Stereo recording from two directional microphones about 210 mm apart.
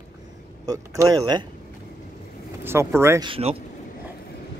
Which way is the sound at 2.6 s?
10° right (ahead or behind).